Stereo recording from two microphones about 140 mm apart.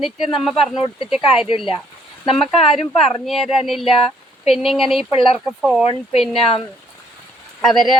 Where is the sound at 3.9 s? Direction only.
45° left (ahead or behind).